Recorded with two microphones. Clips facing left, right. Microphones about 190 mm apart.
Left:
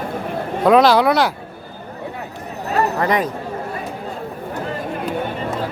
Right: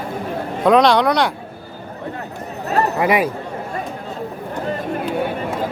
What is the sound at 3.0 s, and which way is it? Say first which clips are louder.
Speech: right 2 dB; 10° right (ahead or behind).